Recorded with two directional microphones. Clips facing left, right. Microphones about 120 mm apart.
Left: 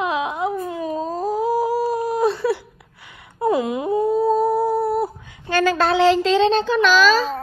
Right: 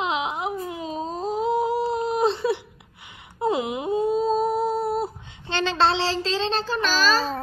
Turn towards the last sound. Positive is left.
turn(degrees=-35)  # may be behind; listen again after turning